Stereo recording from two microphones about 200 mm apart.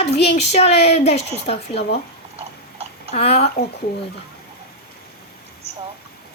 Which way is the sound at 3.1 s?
30° left (ahead or behind).